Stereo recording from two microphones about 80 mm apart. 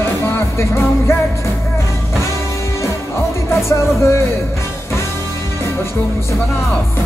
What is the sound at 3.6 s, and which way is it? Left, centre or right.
Music, left.